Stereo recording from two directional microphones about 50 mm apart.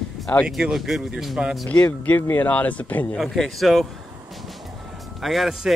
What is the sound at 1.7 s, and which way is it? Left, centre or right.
Speech, left.